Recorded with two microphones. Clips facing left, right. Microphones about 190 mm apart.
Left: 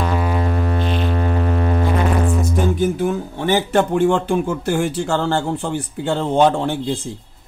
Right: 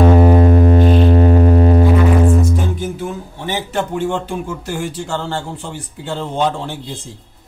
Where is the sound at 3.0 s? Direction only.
60° left (ahead or behind).